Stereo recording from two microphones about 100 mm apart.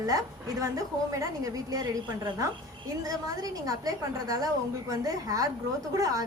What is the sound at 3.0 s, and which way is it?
A woman's voice, 35° right (ahead or behind).